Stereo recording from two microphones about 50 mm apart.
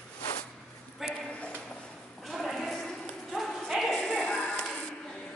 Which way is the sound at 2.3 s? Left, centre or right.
Centre.